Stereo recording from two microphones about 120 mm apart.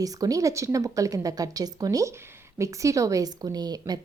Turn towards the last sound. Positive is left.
turn(degrees=-35)  # may be behind; listen again after turning